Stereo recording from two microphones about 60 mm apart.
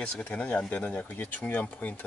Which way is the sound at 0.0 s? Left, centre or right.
Centre.